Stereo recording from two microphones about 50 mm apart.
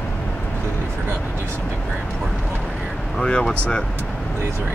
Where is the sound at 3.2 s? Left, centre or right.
Centre.